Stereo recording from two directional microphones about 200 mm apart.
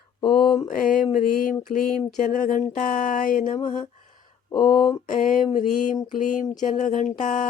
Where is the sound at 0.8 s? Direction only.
40° left (ahead or behind).